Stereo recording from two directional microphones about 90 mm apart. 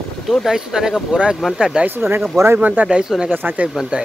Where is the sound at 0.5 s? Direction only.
5° right (ahead or behind).